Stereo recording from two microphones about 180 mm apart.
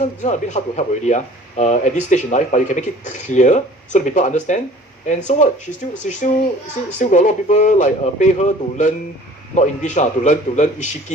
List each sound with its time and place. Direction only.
0.0 s speech: 40° left (ahead or behind)